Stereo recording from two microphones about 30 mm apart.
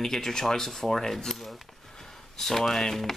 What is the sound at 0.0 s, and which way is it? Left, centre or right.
Speech, centre.